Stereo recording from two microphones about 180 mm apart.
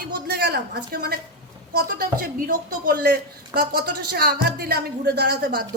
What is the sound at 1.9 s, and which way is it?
Speech, 50° right (ahead or behind).